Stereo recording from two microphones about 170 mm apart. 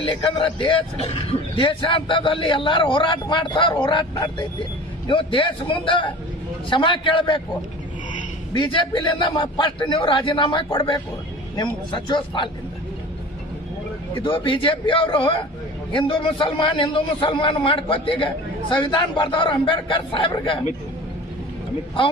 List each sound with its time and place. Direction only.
0.0 s a man's voice: 30° left (ahead or behind)
8.5 s a man's voice: 30° left (ahead or behind)
14.2 s a man's voice: 30° left (ahead or behind)